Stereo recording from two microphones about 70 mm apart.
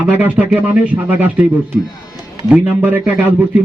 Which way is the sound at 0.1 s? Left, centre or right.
Right.